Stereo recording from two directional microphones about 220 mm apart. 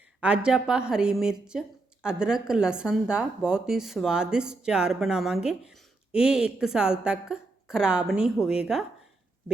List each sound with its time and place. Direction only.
0.2 s a woman's voice: 5° right (ahead or behind)